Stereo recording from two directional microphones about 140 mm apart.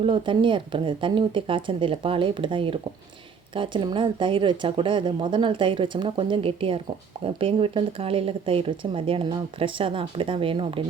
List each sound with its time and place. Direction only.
0.0 s speech: 35° right (ahead or behind)